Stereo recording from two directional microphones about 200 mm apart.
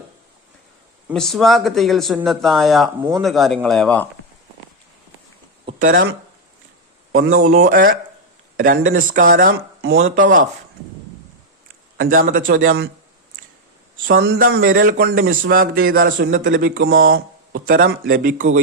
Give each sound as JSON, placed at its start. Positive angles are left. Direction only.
{"t": 1.1, "sound": "speech", "side_deg": 0}
{"t": 5.8, "sound": "a man's voice", "side_deg": -45}
{"t": 7.1, "sound": "speech", "side_deg": -85}
{"t": 7.5, "sound": "a man's voice", "side_deg": -45}
{"t": 11.9, "sound": "a man's voice", "side_deg": -45}
{"t": 12.6, "sound": "a man's voice", "side_deg": -55}
{"t": 14.1, "sound": "a man's voice", "side_deg": -50}
{"t": 16.1, "sound": "a man's voice", "side_deg": -60}
{"t": 16.6, "sound": "a man's voice", "side_deg": -45}